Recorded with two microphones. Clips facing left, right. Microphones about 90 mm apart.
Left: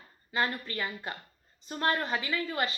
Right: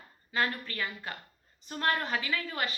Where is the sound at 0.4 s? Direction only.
20° left (ahead or behind).